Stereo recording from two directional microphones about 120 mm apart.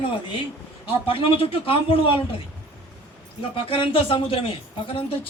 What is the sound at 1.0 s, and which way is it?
A man's voice, 50° left (ahead or behind).